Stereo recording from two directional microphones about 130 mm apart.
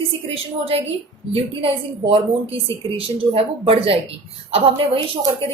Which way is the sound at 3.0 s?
45° right (ahead or behind).